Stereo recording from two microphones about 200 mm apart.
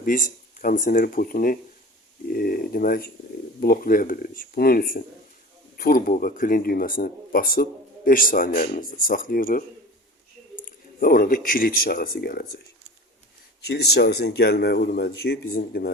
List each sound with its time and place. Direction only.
0.0 s speech: 40° left (ahead or behind)
10.7 s speech: 45° left (ahead or behind)
13.6 s speech: 55° left (ahead or behind)